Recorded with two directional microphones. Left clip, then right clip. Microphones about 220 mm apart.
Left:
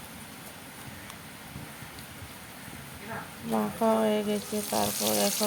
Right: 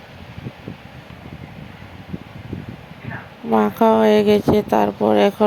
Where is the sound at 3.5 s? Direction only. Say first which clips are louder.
Right 12 dB; 40° right (ahead or behind).